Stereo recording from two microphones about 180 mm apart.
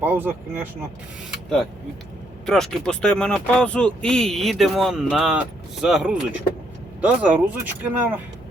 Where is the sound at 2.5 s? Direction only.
5° left (ahead or behind).